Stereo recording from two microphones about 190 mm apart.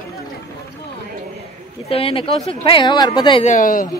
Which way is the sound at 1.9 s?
30° left (ahead or behind).